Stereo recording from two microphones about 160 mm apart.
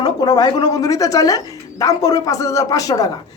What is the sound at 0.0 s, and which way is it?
A woman's voice, 25° left (ahead or behind).